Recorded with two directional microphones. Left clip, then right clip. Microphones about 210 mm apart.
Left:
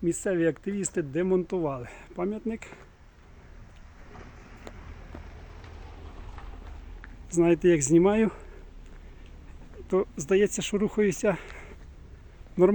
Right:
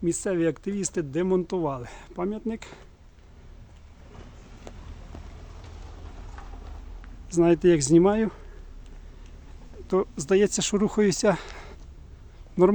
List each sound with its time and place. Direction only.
0.0 s speech: 5° right (ahead or behind)
4.8 s vehicle: 55° right (ahead or behind)
7.4 s speech: 10° right (ahead or behind)
8.1 s speech: 10° left (ahead or behind)
9.9 s speech: 5° right (ahead or behind)